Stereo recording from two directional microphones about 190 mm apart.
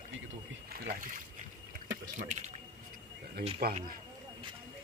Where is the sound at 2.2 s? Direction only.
40° right (ahead or behind).